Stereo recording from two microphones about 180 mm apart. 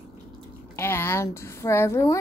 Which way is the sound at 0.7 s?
15° left (ahead or behind).